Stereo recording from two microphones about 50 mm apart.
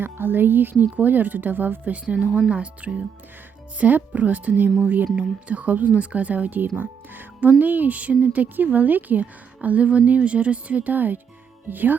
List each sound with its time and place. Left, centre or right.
0.0 s speech: right
2.1 s speech: centre; by 11.9 s right